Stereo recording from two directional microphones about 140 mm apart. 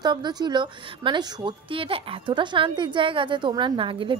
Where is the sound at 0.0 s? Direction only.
30° right (ahead or behind).